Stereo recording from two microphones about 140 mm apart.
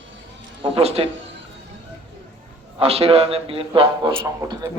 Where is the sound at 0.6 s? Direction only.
45° right (ahead or behind).